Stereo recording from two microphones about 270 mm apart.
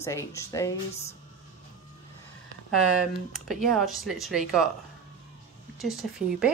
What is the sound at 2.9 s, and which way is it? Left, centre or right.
Speech, centre.